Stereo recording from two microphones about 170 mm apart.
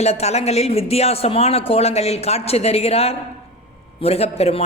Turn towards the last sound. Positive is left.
turn(degrees=35)  # may be behind; listen again after turning